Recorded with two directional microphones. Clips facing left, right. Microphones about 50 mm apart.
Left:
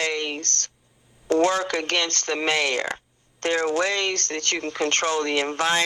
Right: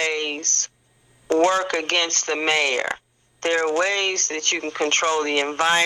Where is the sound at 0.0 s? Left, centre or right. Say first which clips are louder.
Right 2 dB; right.